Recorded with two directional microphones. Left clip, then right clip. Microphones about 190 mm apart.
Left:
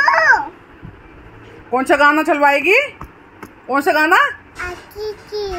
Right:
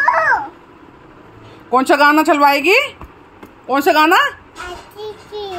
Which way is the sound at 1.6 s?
5° right (ahead or behind).